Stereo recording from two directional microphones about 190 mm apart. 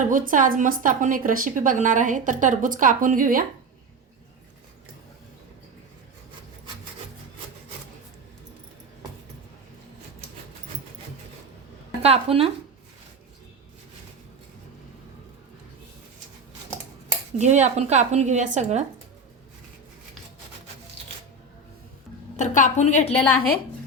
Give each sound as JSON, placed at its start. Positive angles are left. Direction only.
{"t": 0.1, "sound": "a woman's voice", "side_deg": -45}
{"t": 12.0, "sound": "speech", "side_deg": -30}
{"t": 17.3, "sound": "speech", "side_deg": -35}
{"t": 22.4, "sound": "a woman's voice", "side_deg": 40}